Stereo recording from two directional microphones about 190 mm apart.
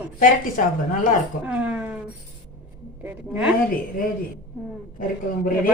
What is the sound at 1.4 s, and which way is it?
Speech, 5° right (ahead or behind).